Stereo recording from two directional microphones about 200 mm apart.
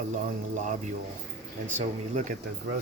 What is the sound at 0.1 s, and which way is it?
Speech, 40° right (ahead or behind).